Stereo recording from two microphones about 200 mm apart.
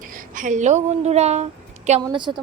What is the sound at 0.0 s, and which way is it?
A woman's voice, 45° right (ahead or behind).